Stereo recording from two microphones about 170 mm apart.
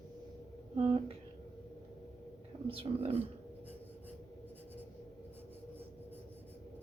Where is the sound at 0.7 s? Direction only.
35° right (ahead or behind).